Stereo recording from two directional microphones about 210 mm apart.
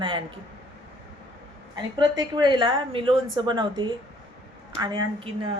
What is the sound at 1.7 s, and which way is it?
A woman's voice, 20° right (ahead or behind).